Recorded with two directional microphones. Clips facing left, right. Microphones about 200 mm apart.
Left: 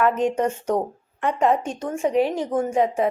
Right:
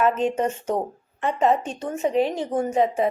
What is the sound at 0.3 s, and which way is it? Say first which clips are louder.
Speech: left 2 dB; 10° right (ahead or behind).